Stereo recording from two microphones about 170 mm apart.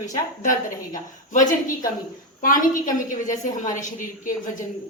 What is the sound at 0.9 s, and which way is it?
A woman's voice, 50° left (ahead or behind).